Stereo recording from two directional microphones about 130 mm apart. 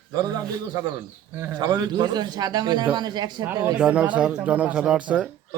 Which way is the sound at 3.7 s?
10° right (ahead or behind).